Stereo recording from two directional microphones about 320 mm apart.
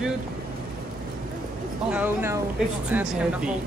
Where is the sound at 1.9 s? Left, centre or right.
Centre.